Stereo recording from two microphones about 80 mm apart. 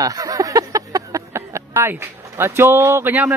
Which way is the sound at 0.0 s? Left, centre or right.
Right.